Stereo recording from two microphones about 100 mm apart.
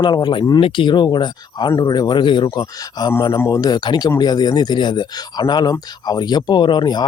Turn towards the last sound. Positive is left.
turn(degrees=45)  # may be behind; listen again after turning